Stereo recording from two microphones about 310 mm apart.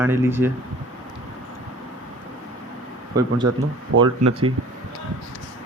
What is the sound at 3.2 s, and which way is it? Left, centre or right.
Speech, centre.